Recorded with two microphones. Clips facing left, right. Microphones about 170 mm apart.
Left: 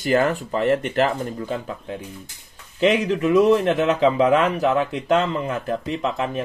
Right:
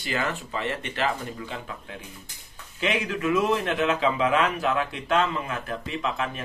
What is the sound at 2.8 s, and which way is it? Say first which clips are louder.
Speech: left 8 dB; 35° left (ahead or behind).